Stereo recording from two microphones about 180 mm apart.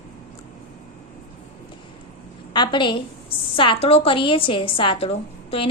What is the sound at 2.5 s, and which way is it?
A woman's voice, 25° left (ahead or behind).